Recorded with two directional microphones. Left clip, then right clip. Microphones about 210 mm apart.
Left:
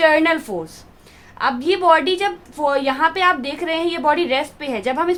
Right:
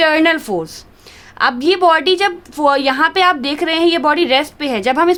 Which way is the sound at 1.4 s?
45° right (ahead or behind).